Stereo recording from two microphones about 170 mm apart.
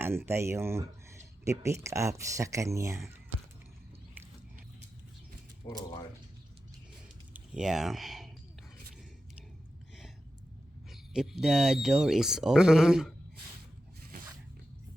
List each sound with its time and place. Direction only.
0.0 s speech: 15° right (ahead or behind)
5.6 s speech: 20° left (ahead or behind)
7.3 s a sound: 5° right (ahead or behind)
10.9 s speech: 5° right (ahead or behind)